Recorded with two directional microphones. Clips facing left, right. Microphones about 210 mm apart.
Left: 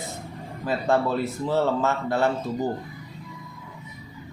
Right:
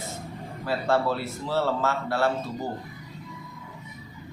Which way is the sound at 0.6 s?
15° left (ahead or behind).